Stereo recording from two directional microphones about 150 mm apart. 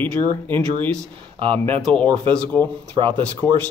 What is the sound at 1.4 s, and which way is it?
Speech, 35° right (ahead or behind).